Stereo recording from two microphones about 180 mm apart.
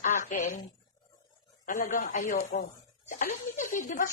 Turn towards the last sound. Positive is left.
turn(degrees=45)  # may be behind; listen again after turning